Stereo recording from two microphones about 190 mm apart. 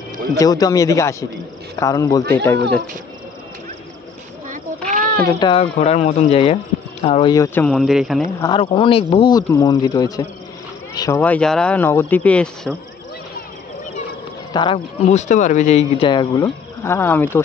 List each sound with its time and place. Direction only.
0.4 s speech: 20° left (ahead or behind)
4.5 s a sound: 45° right (ahead or behind)
5.2 s speech: 25° left (ahead or behind)
5.6 s speech: 35° left (ahead or behind)
7.3 s speech: 15° left (ahead or behind)
8.4 s speech: 25° left (ahead or behind); by 12.7 s 5° left (ahead or behind)
14.5 s speech: 25° left (ahead or behind)
15.0 s speech: 40° left (ahead or behind)
16.1 s speech: 20° left (ahead or behind)